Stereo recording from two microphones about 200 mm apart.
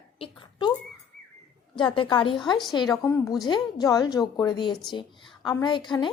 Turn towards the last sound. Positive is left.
turn(degrees=20)  # may be behind; listen again after turning